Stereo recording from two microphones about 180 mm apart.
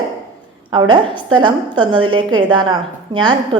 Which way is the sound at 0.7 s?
25° right (ahead or behind).